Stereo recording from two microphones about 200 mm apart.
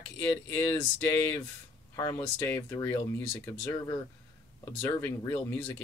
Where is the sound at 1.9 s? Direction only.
15° left (ahead or behind).